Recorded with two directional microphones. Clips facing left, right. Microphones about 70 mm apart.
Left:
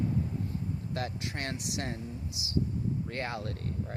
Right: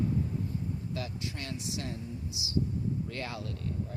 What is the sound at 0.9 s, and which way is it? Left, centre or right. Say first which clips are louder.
Speech: left 2 dB; left.